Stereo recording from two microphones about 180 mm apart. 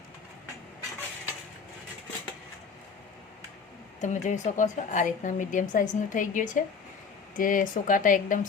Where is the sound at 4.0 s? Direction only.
45° left (ahead or behind).